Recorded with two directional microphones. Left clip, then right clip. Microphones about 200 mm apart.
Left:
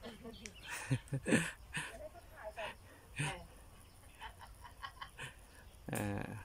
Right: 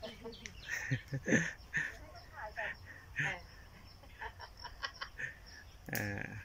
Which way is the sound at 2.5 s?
15° left (ahead or behind).